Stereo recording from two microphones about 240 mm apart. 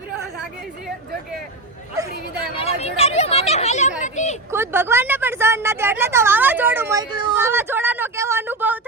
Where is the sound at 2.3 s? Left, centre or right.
Left.